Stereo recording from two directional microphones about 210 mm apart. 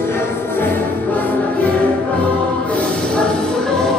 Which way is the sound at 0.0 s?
10° left (ahead or behind).